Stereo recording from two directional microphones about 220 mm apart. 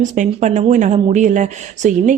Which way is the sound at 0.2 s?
35° right (ahead or behind).